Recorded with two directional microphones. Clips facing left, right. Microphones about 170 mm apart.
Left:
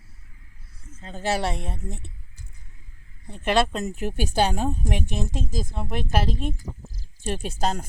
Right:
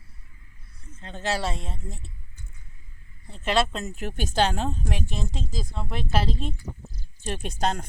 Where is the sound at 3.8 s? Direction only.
15° left (ahead or behind).